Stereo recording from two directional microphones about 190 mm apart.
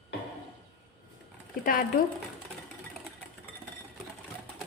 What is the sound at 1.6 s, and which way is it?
Speech, 45° left (ahead or behind).